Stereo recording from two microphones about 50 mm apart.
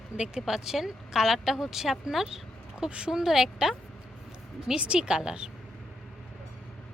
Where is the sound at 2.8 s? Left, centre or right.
Right.